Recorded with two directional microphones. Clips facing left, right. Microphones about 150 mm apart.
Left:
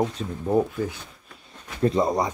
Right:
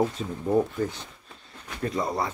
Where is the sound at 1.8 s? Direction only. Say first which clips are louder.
Left 6 dB; 25° left (ahead or behind).